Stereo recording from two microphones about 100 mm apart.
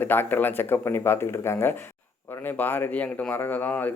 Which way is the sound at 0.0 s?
20° left (ahead or behind).